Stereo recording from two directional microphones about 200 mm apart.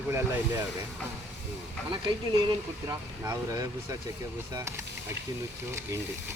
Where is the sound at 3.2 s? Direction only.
15° right (ahead or behind).